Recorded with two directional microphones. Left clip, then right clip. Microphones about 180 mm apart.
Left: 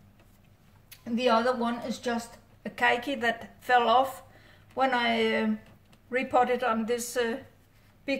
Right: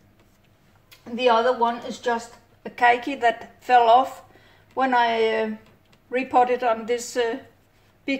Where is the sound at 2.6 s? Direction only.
15° right (ahead or behind).